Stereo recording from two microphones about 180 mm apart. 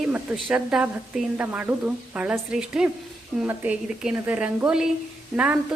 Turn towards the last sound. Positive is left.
turn(degrees=-5)  # may be behind; listen again after turning